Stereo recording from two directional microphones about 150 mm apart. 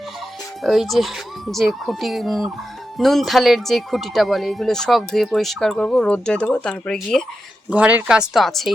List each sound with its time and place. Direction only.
0.6 s speech: centre (ahead or behind)
7.7 s speech: 10° right (ahead or behind)